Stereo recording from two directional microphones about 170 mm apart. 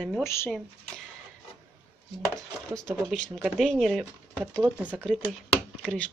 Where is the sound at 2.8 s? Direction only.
5° left (ahead or behind).